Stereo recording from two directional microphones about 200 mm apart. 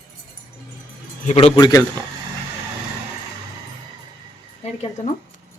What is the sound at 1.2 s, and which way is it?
Speech, 30° left (ahead or behind).